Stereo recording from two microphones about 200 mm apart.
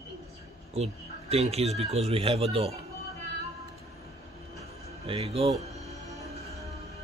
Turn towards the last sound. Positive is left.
turn(degrees=-30)  # may be behind; listen again after turning